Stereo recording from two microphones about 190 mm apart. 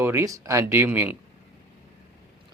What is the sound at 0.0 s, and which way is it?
Speech, 10° right (ahead or behind).